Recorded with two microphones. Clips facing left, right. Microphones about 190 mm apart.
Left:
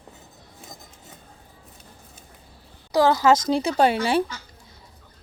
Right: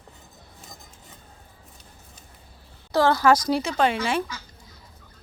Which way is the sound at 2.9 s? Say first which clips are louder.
Left 1 dB; 15° left (ahead or behind).